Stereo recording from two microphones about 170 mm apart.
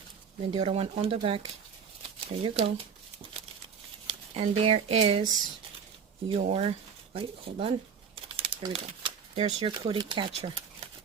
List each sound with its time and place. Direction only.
0.5 s speech: 40° right (ahead or behind)
2.4 s speech: 35° right (ahead or behind)
4.0 s speech: 35° right (ahead or behind)
8.1 s a sound: 30° right (ahead or behind)
9.6 s speech: 30° right (ahead or behind)